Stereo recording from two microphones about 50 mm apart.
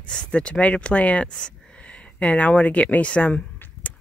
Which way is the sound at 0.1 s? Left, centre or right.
Centre.